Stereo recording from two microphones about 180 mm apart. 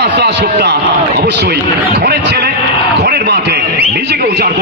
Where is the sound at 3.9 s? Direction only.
65° right (ahead or behind).